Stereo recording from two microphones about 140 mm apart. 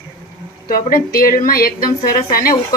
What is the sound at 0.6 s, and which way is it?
A woman's voice, 90° left.